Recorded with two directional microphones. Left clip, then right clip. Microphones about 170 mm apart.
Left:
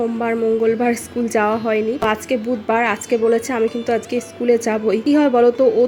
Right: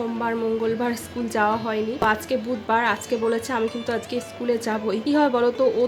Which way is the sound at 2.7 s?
15° left (ahead or behind).